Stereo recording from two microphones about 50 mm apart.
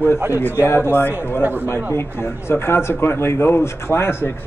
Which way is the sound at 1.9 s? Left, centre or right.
Left.